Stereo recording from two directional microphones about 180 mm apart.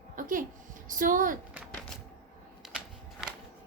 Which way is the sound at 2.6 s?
5° right (ahead or behind).